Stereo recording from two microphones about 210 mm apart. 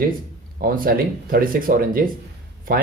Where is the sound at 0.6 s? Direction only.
45° right (ahead or behind).